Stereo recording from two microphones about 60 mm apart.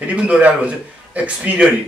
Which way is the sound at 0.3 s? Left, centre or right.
Centre.